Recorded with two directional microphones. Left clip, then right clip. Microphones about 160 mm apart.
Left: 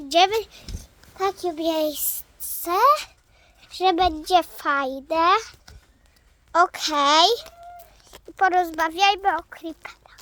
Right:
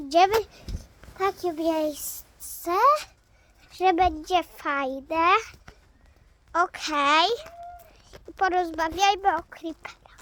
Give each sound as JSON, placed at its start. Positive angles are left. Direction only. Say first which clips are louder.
{"t": 0.0, "sound": "a child's voice", "louder": "left 1 dB", "side_deg": 5}
{"t": 5.3, "sound": "a child's voice", "louder": "left 2 dB", "side_deg": 5}
{"t": 6.5, "sound": "a child's voice", "louder": "left 5 dB", "side_deg": 15}
{"t": 8.0, "sound": "speech", "louder": "left 4 dB", "side_deg": 5}
{"t": 9.0, "sound": "a child's voice", "louder": "left 2 dB", "side_deg": -15}